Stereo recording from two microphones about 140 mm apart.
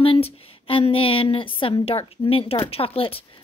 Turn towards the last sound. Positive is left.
turn(degrees=40)  # may be behind; listen again after turning